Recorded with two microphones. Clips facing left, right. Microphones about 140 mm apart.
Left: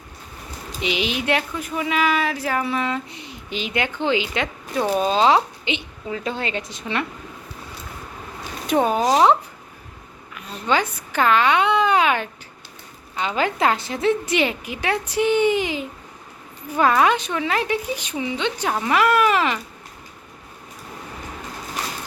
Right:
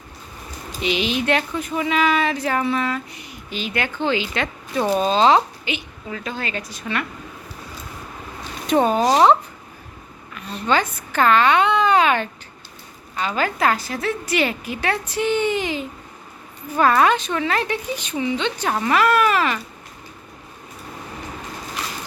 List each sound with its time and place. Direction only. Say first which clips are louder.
0.8 s speech: right 2 dB; 15° left (ahead or behind)
5.6 s a woman's voice: left 2 dB; 25° left (ahead or behind)
8.6 s speech: right 2 dB; 10° left (ahead or behind)
10.3 s speech: right 1 dB; 10° left (ahead or behind)